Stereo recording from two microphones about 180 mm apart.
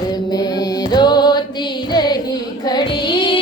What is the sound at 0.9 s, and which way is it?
Music, 25° left (ahead or behind).